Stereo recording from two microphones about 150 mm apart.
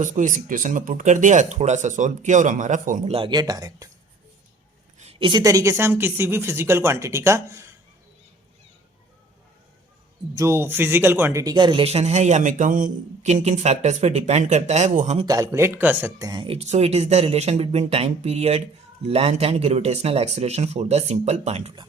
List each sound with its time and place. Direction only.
0.0 s speech: 55° right (ahead or behind)
3.1 s speech: 35° right (ahead or behind)
5.2 s speech: 25° right (ahead or behind)
10.3 s speech: 15° right (ahead or behind); by 15.3 s 50° right (ahead or behind)
15.3 s speech: 20° right (ahead or behind); by 21.7 s 45° right (ahead or behind)